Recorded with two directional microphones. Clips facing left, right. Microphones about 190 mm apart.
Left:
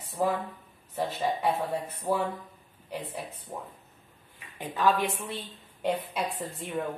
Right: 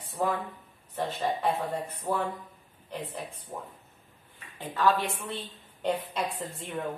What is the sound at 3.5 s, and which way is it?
A woman's voice, 15° left (ahead or behind).